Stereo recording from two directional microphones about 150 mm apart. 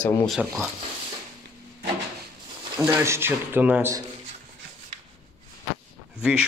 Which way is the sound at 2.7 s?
15° right (ahead or behind).